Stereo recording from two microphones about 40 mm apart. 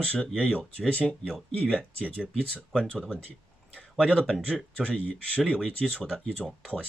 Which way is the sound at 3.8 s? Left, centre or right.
Left.